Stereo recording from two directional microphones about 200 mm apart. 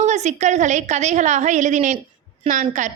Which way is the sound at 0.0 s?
35° right (ahead or behind).